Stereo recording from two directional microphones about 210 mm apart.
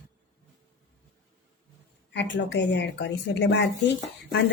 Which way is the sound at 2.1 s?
55° left (ahead or behind).